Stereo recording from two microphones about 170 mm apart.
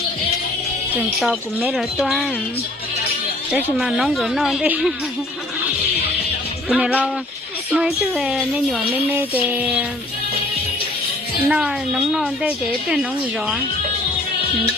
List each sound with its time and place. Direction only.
1.2 s a woman's voice: centre (ahead or behind)
3.5 s a woman's voice: 5° right (ahead or behind)
6.7 s a woman's voice: 5° right (ahead or behind)
9.0 s music: 10° right (ahead or behind)
11.4 s a woman's voice: 5° right (ahead or behind)